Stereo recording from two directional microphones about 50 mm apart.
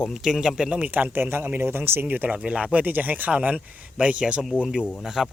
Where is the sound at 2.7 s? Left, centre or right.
Right.